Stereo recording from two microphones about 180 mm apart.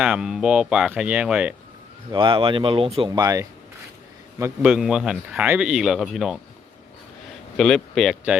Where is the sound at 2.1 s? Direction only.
30° right (ahead or behind).